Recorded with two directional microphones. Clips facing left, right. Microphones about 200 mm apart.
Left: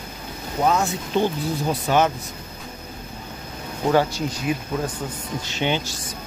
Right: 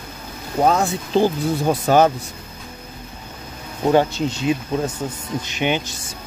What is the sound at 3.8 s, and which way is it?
Speech, 20° right (ahead or behind).